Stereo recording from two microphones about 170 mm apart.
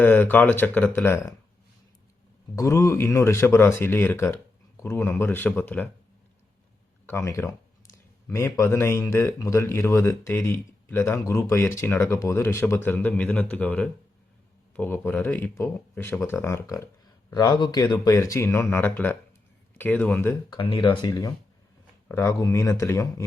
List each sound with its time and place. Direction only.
0.0 s speech: 10° left (ahead or behind)
2.6 s speech: 20° left (ahead or behind)
7.1 s speech: 15° left (ahead or behind)
20.5 s speech: 30° left (ahead or behind)